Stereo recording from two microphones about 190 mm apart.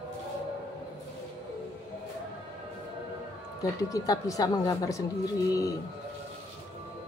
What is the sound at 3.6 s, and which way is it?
Speech, 20° left (ahead or behind).